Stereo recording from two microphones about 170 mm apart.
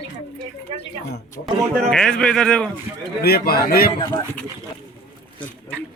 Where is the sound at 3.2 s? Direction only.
65° left (ahead or behind).